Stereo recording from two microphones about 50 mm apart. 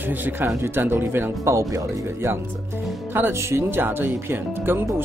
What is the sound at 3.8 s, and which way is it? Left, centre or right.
Speech, right.